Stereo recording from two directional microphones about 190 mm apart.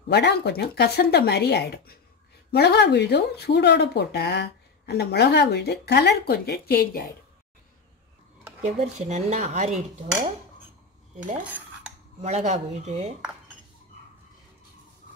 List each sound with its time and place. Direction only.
0.1 s speech: 60° left (ahead or behind)
8.6 s speech: 35° right (ahead or behind)
12.2 s speech: 35° right (ahead or behind)